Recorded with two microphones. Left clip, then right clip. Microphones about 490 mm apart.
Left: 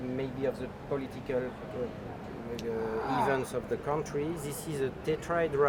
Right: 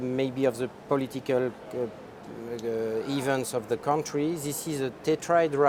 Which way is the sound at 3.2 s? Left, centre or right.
Right.